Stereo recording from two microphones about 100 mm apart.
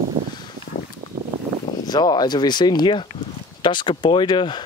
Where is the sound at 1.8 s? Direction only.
45° left (ahead or behind).